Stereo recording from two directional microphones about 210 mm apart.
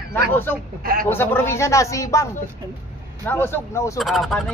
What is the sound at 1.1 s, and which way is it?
Speech, 10° left (ahead or behind).